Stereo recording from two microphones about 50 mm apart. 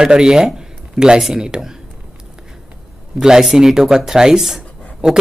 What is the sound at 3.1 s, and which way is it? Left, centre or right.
Speech, centre.